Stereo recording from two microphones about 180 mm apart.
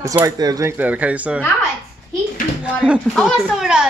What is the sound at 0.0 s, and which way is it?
Speech, 15° right (ahead or behind).